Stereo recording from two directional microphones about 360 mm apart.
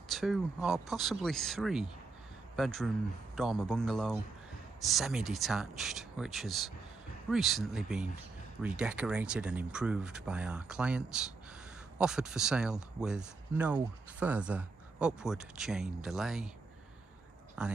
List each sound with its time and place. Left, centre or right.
0.1 s speech: centre
17.6 s speech: centre